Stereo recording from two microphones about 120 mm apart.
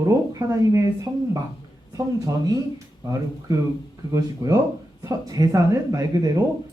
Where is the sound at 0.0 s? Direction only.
25° right (ahead or behind).